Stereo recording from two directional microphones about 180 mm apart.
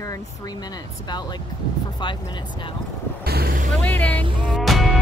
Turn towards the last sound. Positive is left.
turn(degrees=0)  # may be behind; listen again after turning